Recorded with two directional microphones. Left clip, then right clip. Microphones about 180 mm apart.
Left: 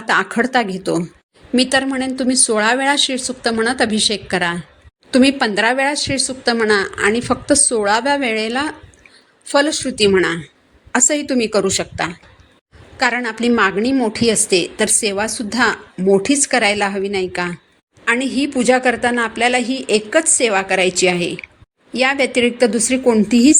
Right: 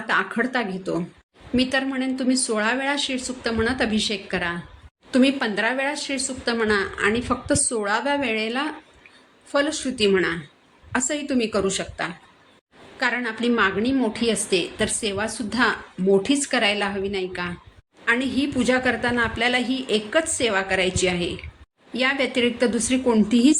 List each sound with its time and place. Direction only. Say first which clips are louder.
0.1 s a woman's voice: left 7 dB; 40° left (ahead or behind)